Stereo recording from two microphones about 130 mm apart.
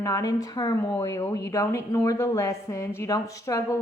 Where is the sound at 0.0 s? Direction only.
25° left (ahead or behind).